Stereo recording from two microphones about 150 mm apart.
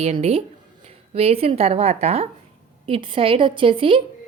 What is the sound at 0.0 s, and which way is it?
A woman's voice, 40° right (ahead or behind).